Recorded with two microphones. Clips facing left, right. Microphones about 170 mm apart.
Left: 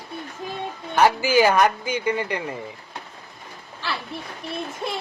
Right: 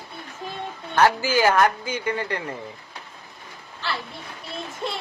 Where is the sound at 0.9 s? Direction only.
15° left (ahead or behind).